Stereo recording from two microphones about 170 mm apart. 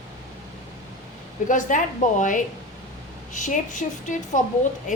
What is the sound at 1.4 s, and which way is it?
A woman's voice, 50° left (ahead or behind).